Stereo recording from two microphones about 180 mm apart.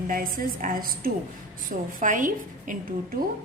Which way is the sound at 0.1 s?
50° right (ahead or behind).